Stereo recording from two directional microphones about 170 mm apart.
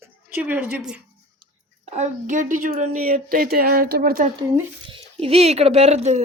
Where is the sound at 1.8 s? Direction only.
40° right (ahead or behind); by 4.2 s 60° right (ahead or behind).